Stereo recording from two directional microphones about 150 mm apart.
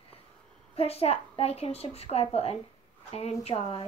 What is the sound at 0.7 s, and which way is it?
A woman's voice, 40° left (ahead or behind).